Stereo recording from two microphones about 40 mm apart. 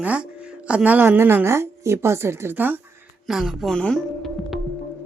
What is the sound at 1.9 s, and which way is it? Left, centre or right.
Speech, right.